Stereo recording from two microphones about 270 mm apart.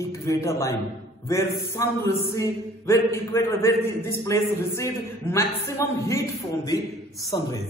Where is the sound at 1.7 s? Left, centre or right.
Centre.